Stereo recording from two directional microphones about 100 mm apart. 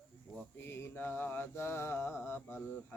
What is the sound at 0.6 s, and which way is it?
Mantra, 25° left (ahead or behind).